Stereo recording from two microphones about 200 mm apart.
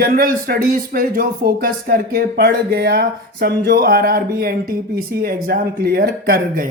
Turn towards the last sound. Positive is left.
turn(degrees=-50)  # may be behind; listen again after turning